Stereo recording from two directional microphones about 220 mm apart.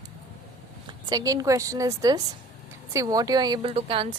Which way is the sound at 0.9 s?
20° right (ahead or behind).